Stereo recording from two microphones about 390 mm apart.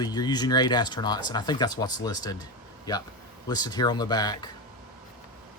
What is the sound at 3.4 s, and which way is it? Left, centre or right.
Speech, centre.